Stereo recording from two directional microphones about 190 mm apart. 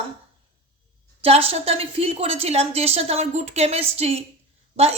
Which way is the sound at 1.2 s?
30° right (ahead or behind).